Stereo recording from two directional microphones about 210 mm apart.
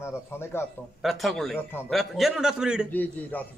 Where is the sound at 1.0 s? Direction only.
Centre (ahead or behind).